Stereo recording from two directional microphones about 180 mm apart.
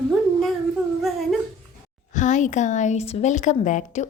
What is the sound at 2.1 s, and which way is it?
Speech, 45° left (ahead or behind).